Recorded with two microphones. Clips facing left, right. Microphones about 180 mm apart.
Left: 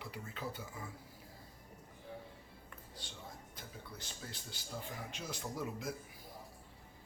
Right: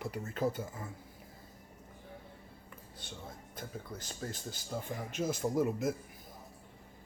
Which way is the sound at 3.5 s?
45° right (ahead or behind).